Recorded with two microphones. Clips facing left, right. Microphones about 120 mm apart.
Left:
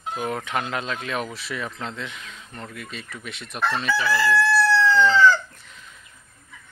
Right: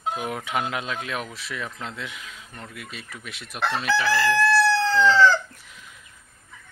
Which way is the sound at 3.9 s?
85° right.